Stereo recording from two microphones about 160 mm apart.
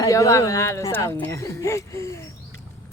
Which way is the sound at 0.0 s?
20° left (ahead or behind).